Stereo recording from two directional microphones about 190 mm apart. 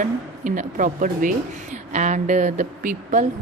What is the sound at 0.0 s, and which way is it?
A woman's voice, 40° right (ahead or behind).